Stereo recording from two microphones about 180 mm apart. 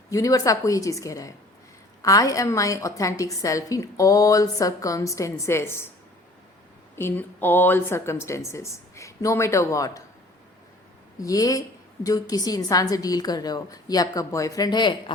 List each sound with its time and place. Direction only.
0.1 s a woman's voice: 20° left (ahead or behind)
6.9 s a woman's voice: 10° left (ahead or behind)
11.2 s a woman's voice: 20° left (ahead or behind)